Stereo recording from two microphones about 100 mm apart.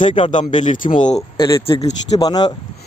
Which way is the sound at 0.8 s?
85° left.